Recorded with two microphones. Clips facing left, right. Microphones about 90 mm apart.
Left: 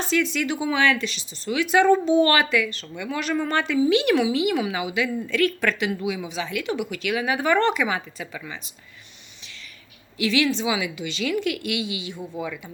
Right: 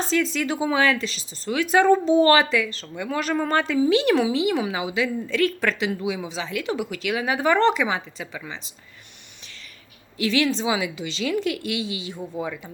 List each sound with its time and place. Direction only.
0.0 s a woman's voice: 35° right (ahead or behind)
10.2 s a woman's voice: 35° right (ahead or behind)